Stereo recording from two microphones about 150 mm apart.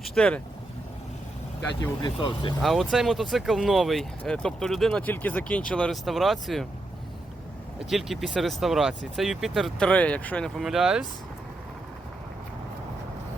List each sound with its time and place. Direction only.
0.0 s speech: centre (ahead or behind)
1.8 s speech: 30° left (ahead or behind)
2.6 s speech: centre (ahead or behind)
7.9 s speech: centre (ahead or behind)